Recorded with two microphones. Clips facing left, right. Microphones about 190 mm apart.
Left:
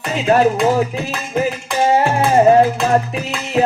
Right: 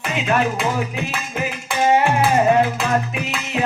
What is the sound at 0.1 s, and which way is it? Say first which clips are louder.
Music: left 7 dB; 35° left (ahead or behind).